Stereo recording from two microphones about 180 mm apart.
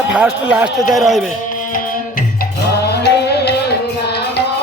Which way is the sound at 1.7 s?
50° left (ahead or behind).